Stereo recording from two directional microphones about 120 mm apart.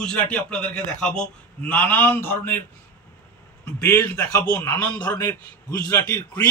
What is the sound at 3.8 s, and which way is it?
Speech, 15° left (ahead or behind).